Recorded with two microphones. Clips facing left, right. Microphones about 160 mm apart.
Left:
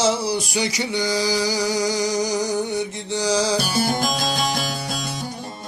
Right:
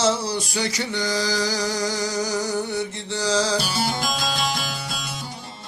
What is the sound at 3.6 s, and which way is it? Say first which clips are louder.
Music: left 3 dB; 45° left (ahead or behind).